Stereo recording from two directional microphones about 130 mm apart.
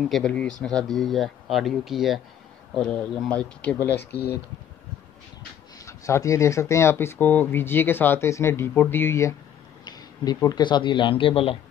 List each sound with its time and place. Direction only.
0.0 s speech: centre (ahead or behind)
5.9 s speech: 25° left (ahead or behind)
9.8 s speech: 30° left (ahead or behind)